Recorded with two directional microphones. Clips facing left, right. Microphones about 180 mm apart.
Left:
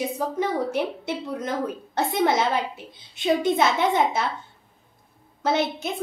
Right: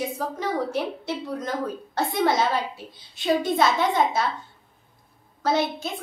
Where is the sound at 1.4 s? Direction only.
20° left (ahead or behind).